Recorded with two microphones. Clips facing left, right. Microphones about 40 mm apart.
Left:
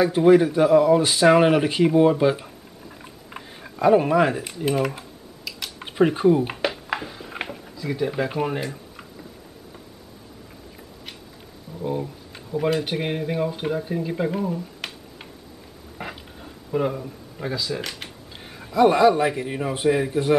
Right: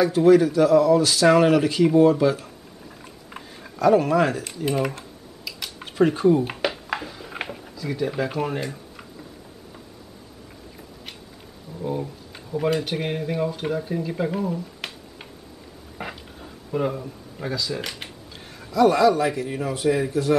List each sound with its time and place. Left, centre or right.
0.0 s speech: left
3.0 s chewing: centre
3.8 s speech: left; by 5.9 s centre
5.9 s a sound: centre
7.7 s speech: centre
12.0 s speech: centre
16.0 s a sound: centre
18.3 s a sound: centre
18.7 s speech: left